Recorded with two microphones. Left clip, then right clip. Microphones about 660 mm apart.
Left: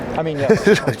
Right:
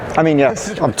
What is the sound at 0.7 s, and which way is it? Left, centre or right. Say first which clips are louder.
Speech: left 12 dB; left.